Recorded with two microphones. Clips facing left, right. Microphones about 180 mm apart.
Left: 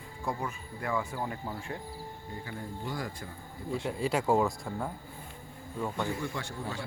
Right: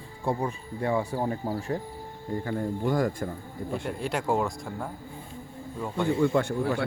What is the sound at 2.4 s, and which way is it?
Speech, 50° right (ahead or behind).